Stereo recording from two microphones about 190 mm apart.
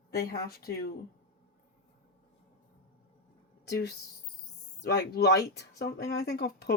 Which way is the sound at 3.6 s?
60° left (ahead or behind).